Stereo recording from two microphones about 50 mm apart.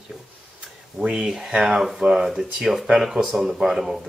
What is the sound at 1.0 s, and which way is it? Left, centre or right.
Speech, centre.